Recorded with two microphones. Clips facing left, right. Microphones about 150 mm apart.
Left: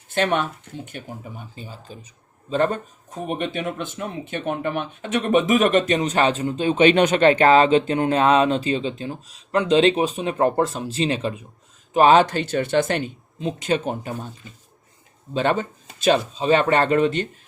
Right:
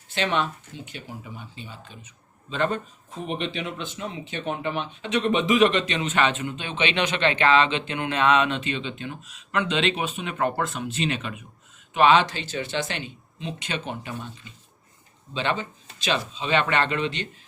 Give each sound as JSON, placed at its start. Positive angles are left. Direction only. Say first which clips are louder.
{"t": 0.1, "sound": "speech", "louder": "left 4 dB", "side_deg": 50}
{"t": 11.9, "sound": "speech", "louder": "left 4 dB", "side_deg": 40}
{"t": 15.3, "sound": "speech", "louder": "left 6 dB", "side_deg": 45}